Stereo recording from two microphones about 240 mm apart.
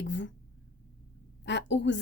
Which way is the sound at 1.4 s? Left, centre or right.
Left.